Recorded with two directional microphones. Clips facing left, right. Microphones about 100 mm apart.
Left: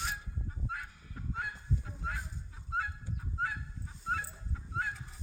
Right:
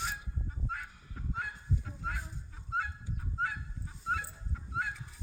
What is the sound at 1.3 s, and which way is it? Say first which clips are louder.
Goose: even; centre (ahead or behind).